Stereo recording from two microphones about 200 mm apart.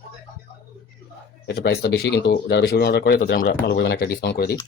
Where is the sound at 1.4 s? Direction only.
55° left (ahead or behind).